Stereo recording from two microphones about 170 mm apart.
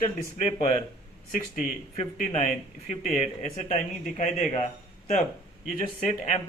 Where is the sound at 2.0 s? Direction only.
40° left (ahead or behind).